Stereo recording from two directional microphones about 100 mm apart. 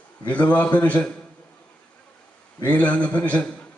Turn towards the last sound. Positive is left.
turn(degrees=10)  # may be behind; listen again after turning